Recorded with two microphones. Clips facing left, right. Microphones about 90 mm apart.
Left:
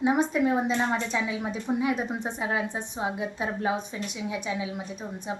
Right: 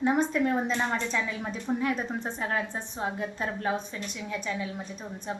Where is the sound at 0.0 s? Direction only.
5° left (ahead or behind).